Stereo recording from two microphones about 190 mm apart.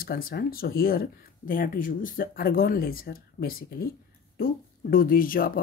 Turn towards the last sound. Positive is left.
turn(degrees=50)  # may be behind; listen again after turning